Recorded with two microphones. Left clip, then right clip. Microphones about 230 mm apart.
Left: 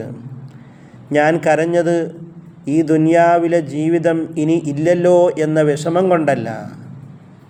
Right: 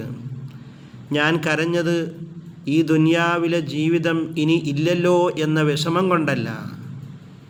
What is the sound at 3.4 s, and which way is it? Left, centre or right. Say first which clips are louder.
Speech: left 6 dB; centre.